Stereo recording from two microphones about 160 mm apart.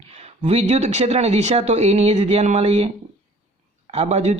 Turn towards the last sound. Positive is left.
turn(degrees=-45)  # may be behind; listen again after turning